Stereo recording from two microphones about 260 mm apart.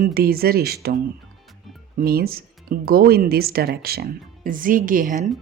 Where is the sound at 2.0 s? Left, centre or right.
Right.